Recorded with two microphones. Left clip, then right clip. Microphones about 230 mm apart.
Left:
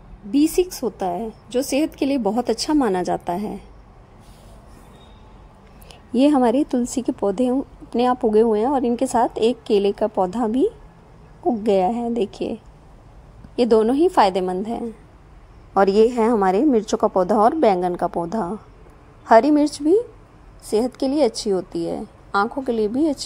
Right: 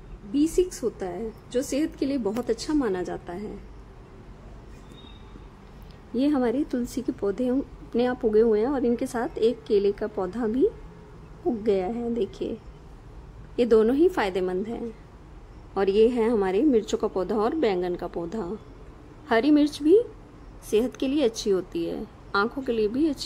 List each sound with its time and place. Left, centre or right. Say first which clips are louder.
0.3 s a woman's voice: left 5 dB; left
6.1 s a woman's voice: left 8 dB; left
13.6 s a woman's voice: left 3 dB; centre